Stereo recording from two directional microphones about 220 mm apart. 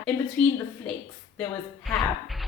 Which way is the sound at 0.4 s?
5° left (ahead or behind).